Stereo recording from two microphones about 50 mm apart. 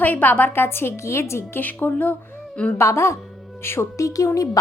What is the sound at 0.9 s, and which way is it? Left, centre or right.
Speech, left.